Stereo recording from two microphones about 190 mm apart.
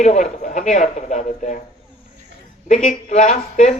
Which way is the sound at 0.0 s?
40° left (ahead or behind).